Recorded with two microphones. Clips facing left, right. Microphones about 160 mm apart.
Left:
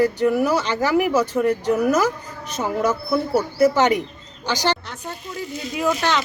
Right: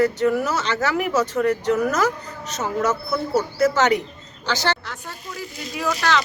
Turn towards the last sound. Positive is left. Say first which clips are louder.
# left 1 dB
turn(degrees=20)  # may be behind; listen again after turning